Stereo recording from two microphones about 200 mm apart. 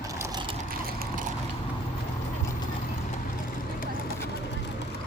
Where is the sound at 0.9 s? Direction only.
50° right (ahead or behind).